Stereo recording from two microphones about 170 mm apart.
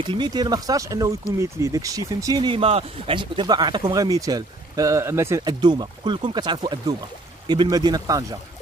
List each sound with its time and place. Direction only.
0.0 s speech: 30° right (ahead or behind)